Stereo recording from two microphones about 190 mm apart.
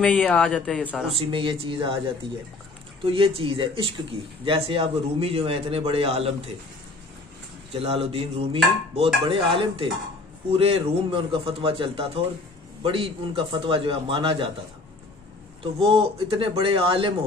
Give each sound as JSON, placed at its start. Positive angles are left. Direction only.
{"t": 0.0, "sound": "speech", "side_deg": 5}
{"t": 1.1, "sound": "dishes", "side_deg": -30}
{"t": 3.0, "sound": "dishes", "side_deg": -30}
{"t": 4.5, "sound": "a man's voice", "side_deg": -30}
{"t": 7.7, "sound": "dishes", "side_deg": -30}
{"t": 15.6, "sound": "dishes", "side_deg": -30}